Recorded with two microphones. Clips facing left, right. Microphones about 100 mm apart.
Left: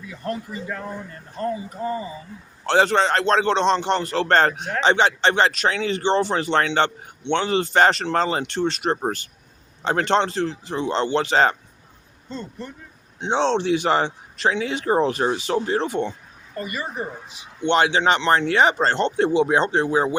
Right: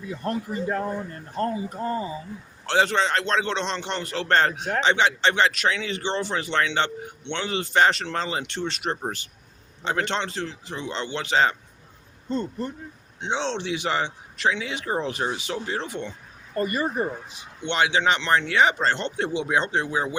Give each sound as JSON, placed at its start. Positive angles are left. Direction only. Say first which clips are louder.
{"t": 0.3, "sound": "a man's voice", "louder": "right 2 dB", "side_deg": -45}
{"t": 2.6, "sound": "speech", "louder": "left 4 dB", "side_deg": 40}
{"t": 12.3, "sound": "a man's voice", "louder": "right 6 dB", "side_deg": -55}
{"t": 13.2, "sound": "speech", "louder": "left 7 dB", "side_deg": 35}
{"t": 16.6, "sound": "speech", "louder": "right 4 dB", "side_deg": -40}
{"t": 17.7, "sound": "speech", "louder": "left 4 dB", "side_deg": 40}